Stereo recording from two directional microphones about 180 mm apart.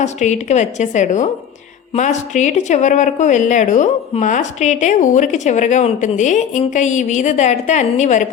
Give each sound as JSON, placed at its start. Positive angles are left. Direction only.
{"t": 0.0, "sound": "a woman's voice", "side_deg": 40}